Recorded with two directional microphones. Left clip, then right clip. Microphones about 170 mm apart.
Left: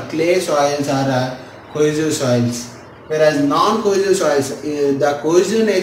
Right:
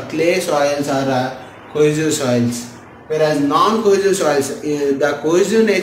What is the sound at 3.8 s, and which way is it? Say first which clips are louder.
A man's voice: right 1 dB; 15° right (ahead or behind).